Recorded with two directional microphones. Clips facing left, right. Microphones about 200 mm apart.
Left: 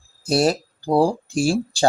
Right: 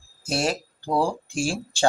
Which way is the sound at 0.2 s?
35° left (ahead or behind).